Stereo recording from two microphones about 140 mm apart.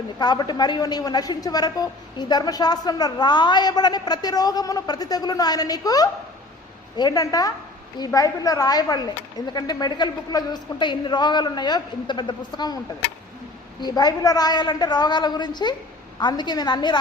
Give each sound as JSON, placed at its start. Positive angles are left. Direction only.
{"t": 0.2, "sound": "a woman's voice", "side_deg": 30}
{"t": 13.8, "sound": "a woman's voice", "side_deg": 30}